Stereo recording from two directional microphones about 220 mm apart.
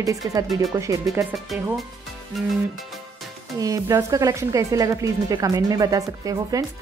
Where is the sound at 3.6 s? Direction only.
15° right (ahead or behind).